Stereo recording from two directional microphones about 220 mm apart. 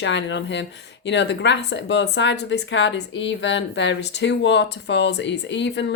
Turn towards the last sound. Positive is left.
turn(degrees=55)  # may be behind; listen again after turning